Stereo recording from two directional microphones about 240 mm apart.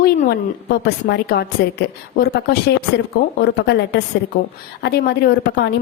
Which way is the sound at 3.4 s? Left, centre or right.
Left.